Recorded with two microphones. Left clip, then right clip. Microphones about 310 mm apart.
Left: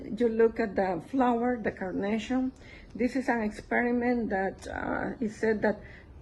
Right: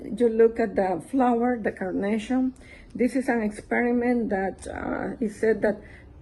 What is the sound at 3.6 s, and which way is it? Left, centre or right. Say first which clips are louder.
A woman's voice: right 3 dB; centre.